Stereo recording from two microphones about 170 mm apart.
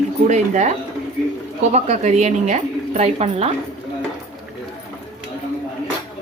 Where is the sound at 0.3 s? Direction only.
45° right (ahead or behind).